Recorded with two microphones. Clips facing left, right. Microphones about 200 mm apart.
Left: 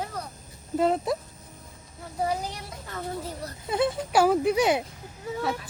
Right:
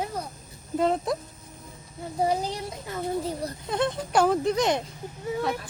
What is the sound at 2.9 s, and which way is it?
Speech, 15° right (ahead or behind).